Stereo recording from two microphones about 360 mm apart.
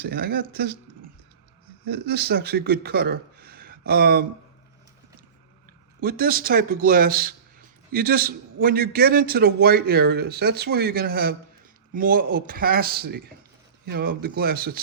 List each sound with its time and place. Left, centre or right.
0.0 s speech: right
6.0 s a man's voice: right